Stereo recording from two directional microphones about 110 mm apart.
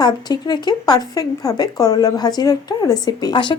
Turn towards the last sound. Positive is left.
turn(degrees=40)  # may be behind; listen again after turning